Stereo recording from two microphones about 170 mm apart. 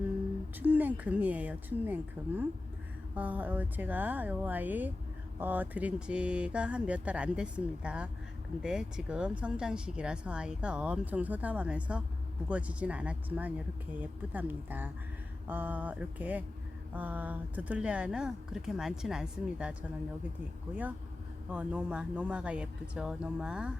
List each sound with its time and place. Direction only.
0.6 s speech: 10° right (ahead or behind)
21.5 s speech: 10° right (ahead or behind)